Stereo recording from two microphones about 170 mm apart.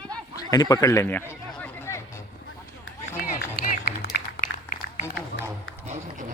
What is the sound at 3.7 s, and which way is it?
Applause, 60° left (ahead or behind).